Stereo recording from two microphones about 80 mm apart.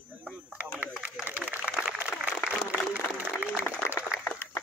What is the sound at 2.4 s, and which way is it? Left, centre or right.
Applause, right.